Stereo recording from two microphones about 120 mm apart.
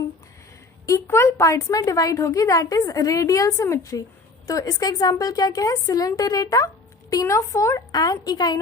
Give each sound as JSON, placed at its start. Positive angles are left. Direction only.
{"t": 0.9, "sound": "speech", "side_deg": 25}